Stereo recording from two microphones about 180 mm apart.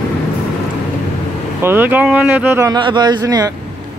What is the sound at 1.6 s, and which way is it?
Speech, 10° right (ahead or behind).